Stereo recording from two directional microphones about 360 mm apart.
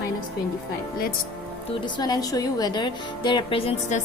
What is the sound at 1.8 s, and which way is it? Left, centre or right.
A woman's voice, centre.